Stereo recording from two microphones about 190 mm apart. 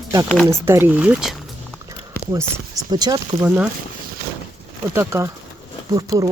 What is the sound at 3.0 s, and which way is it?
Speech, 15° right (ahead or behind).